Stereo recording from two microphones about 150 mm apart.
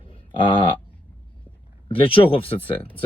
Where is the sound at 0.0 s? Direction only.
35° left (ahead or behind).